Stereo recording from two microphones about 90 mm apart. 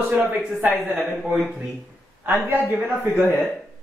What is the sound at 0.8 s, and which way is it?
Speech, centre (ahead or behind).